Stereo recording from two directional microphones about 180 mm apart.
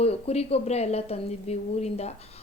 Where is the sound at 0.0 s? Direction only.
35° left (ahead or behind).